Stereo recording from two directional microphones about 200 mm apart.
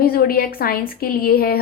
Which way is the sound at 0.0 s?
50° left (ahead or behind).